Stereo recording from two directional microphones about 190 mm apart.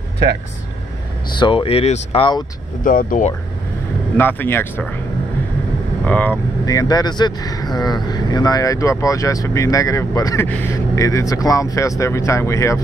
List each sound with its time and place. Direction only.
1.4 s speech: 30° left (ahead or behind)
2.8 s speech: 45° left (ahead or behind)
4.2 s speech: 10° left (ahead or behind)
6.0 s speech: 10° left (ahead or behind)